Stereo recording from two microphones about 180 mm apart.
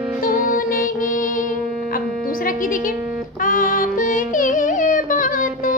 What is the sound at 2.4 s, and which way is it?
Music, 50° left (ahead or behind).